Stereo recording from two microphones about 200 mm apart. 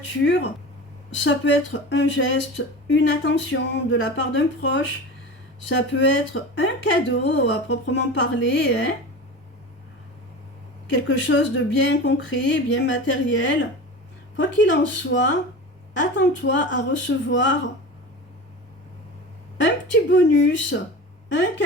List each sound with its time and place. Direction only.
0.1 s speech: 65° left (ahead or behind)
10.9 s speech: 65° left (ahead or behind)
19.5 s speech: 65° left (ahead or behind)